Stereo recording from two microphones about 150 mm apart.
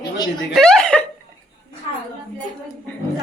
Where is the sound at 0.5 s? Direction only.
5° left (ahead or behind).